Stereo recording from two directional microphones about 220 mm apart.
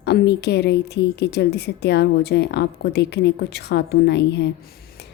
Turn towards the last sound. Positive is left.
turn(degrees=50)  # may be behind; listen again after turning